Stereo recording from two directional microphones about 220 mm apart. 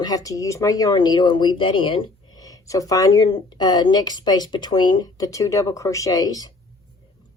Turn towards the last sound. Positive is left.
turn(degrees=15)  # may be behind; listen again after turning